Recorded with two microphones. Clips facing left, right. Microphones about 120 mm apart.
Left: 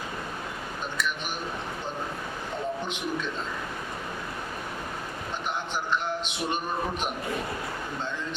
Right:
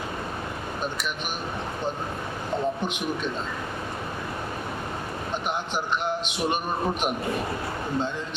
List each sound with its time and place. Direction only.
0.9 s speech: 20° right (ahead or behind)
5.7 s speech: 20° right (ahead or behind)